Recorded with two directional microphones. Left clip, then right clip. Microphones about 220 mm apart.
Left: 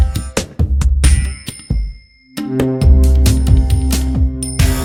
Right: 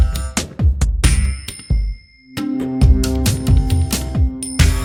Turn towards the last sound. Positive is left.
turn(degrees=0)  # may be behind; listen again after turning